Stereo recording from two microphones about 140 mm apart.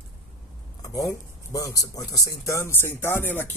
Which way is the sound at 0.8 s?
25° left (ahead or behind).